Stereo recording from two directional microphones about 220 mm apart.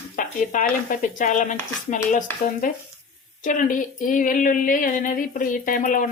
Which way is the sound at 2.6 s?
35° left (ahead or behind).